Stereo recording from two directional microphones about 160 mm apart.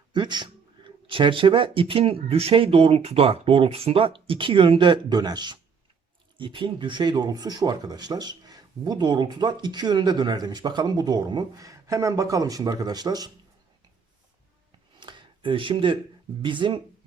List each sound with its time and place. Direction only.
0.1 s speech: 30° right (ahead or behind)
14.9 s a sound: 30° right (ahead or behind)
16.4 s speech: 30° right (ahead or behind)